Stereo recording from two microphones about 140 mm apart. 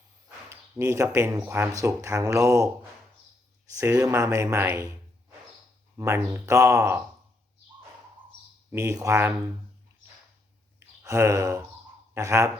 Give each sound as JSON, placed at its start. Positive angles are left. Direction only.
{"t": 0.5, "sound": "speech", "side_deg": -20}
{"t": 3.8, "sound": "speech", "side_deg": -20}
{"t": 6.0, "sound": "speech", "side_deg": -20}
{"t": 8.7, "sound": "speech", "side_deg": -25}
{"t": 10.8, "sound": "a sound", "side_deg": -20}
{"t": 12.1, "sound": "speech", "side_deg": -20}